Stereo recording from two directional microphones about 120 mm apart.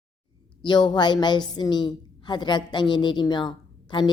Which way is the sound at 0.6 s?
40° left (ahead or behind).